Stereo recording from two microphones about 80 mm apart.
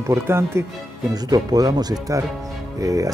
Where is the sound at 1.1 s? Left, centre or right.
Right.